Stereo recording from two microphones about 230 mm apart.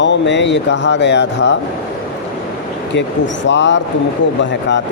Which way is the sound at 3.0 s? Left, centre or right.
Left.